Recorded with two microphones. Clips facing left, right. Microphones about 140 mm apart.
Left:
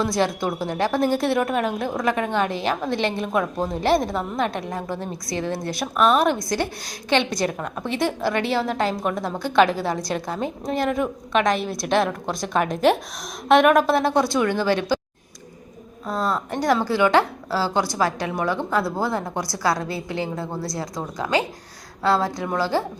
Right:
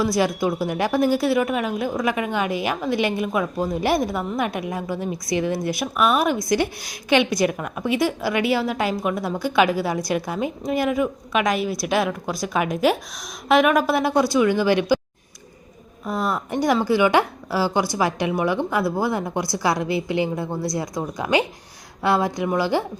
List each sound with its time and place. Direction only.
0.2 s a woman's voice: 5° right (ahead or behind)
16.0 s a woman's voice: 10° right (ahead or behind)